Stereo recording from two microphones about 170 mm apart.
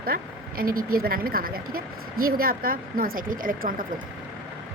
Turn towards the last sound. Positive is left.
turn(degrees=-55)  # may be behind; listen again after turning